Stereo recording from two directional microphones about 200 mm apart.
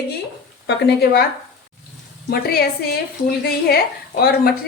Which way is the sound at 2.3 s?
50° left (ahead or behind).